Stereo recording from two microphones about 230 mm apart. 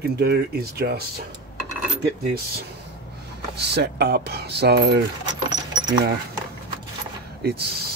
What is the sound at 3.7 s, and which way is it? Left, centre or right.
Speech, right.